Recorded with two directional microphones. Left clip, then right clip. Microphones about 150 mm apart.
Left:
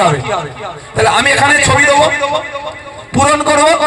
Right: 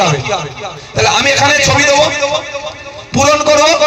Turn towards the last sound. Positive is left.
turn(degrees=-25)  # may be behind; listen again after turning